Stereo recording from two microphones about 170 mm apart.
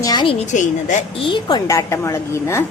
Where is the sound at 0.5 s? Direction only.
45° left (ahead or behind).